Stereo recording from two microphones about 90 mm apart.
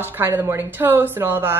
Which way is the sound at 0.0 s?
25° right (ahead or behind).